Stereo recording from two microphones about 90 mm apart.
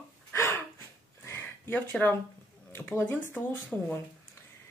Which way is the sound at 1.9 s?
15° left (ahead or behind).